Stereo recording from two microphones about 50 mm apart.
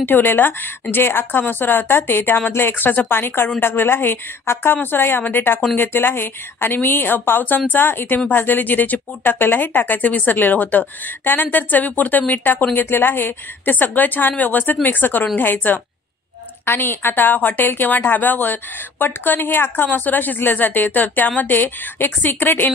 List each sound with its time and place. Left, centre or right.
0.0 s a woman's voice: left